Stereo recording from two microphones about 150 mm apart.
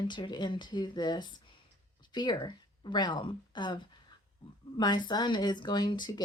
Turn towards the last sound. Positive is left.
turn(degrees=30)  # may be behind; listen again after turning